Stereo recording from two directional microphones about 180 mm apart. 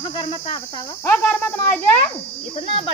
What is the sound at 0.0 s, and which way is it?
Speech, 30° left (ahead or behind).